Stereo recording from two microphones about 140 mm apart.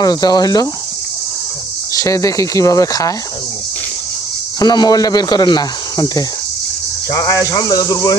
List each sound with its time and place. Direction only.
0.0 s a man's voice: 30° left (ahead or behind)
2.0 s a man's voice: 20° left (ahead or behind)
4.6 s a man's voice: 30° left (ahead or behind)